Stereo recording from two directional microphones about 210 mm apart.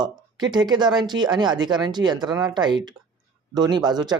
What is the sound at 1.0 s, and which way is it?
Speech, 20° right (ahead or behind).